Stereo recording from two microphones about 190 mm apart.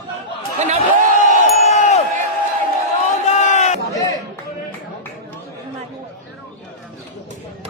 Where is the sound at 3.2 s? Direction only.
40° left (ahead or behind).